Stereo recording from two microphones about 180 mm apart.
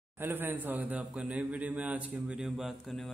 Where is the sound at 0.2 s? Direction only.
10° right (ahead or behind).